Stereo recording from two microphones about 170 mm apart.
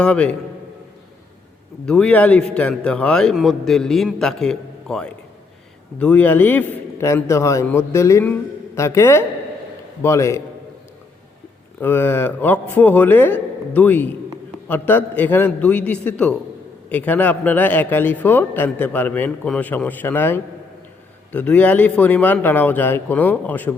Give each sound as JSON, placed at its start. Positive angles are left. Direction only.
{"t": 0.0, "sound": "a man's voice", "side_deg": 5}
{"t": 1.9, "sound": "a man's voice", "side_deg": 5}
{"t": 11.8, "sound": "a man's voice", "side_deg": 10}